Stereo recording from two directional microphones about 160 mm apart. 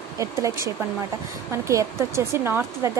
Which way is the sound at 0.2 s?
20° right (ahead or behind).